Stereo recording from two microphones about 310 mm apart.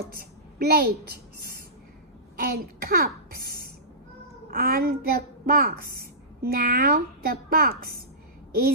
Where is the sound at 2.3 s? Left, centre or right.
Right.